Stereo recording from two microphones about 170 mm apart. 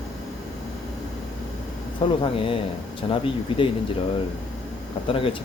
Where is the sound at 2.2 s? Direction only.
30° left (ahead or behind).